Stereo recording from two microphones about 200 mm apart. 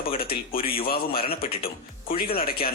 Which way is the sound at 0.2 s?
50° left (ahead or behind).